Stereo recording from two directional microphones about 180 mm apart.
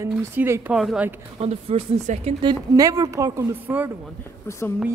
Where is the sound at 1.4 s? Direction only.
35° right (ahead or behind).